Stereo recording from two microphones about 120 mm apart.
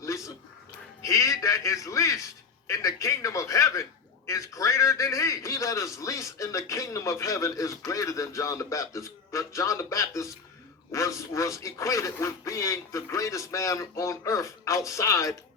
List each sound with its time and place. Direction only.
1.0 s a man's voice: 25° left (ahead or behind)